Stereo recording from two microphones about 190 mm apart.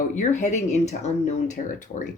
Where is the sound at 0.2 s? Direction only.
40° left (ahead or behind).